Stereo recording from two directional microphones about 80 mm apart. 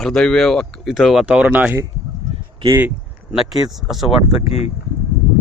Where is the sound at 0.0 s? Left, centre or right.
Centre.